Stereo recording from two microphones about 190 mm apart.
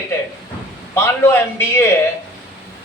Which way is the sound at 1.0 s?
15° left (ahead or behind).